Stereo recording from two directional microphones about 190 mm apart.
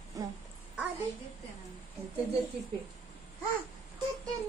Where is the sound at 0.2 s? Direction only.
15° right (ahead or behind).